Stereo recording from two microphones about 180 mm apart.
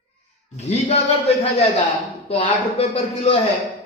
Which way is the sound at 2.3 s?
35° left (ahead or behind).